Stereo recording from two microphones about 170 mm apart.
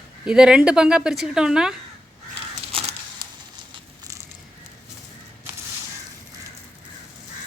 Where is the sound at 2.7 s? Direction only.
35° right (ahead or behind).